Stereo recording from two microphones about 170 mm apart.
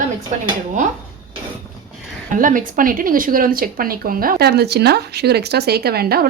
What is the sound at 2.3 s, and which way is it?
Speech, 50° right (ahead or behind).